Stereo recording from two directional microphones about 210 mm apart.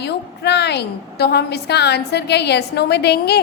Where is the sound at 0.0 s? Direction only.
55° left (ahead or behind).